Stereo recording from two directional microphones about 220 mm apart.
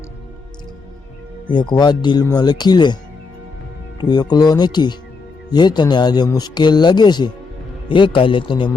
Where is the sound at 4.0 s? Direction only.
20° left (ahead or behind).